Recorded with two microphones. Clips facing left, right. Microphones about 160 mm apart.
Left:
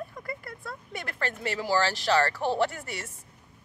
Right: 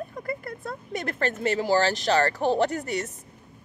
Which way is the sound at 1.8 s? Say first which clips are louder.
Right 2 dB; 20° right (ahead or behind).